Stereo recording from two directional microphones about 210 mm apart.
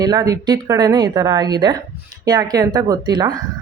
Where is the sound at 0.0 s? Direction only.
20° right (ahead or behind).